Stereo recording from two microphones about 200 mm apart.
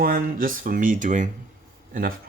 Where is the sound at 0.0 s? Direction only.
45° right (ahead or behind).